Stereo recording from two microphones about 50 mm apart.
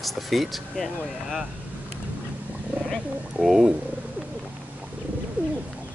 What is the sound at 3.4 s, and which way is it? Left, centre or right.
Speech, centre.